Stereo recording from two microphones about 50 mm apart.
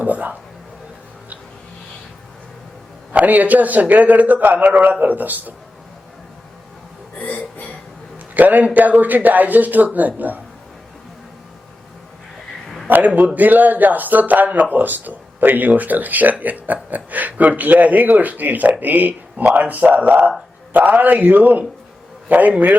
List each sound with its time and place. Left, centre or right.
0.0 s speech: right
3.1 s speech: right
7.2 s music: left
8.4 s speech: right
12.9 s speech: right